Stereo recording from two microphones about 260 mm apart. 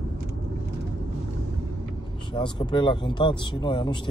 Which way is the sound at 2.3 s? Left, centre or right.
Centre.